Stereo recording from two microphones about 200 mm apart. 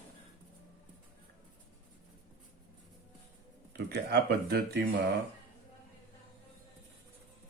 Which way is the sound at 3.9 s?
55° right (ahead or behind).